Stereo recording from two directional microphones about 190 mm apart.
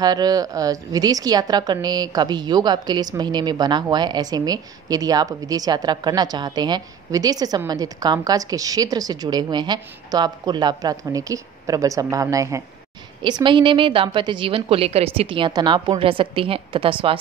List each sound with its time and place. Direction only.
0.0 s a woman's voice: 20° right (ahead or behind)